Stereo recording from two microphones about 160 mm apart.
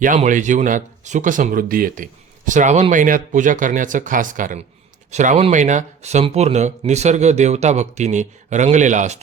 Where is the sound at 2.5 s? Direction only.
50° right (ahead or behind).